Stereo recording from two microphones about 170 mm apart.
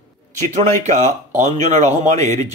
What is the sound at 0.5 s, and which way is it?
Speech, 45° right (ahead or behind).